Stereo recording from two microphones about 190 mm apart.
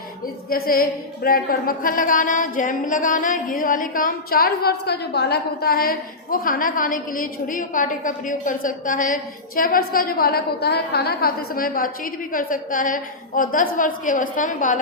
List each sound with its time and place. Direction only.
0.5 s a woman's voice: 50° left (ahead or behind)